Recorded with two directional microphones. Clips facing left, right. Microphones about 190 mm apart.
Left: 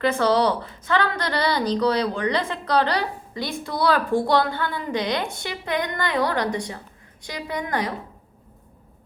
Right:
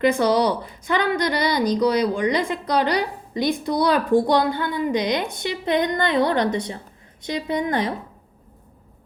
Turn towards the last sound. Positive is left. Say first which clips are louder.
# right 4 dB
turn(degrees=-25)  # may be behind; listen again after turning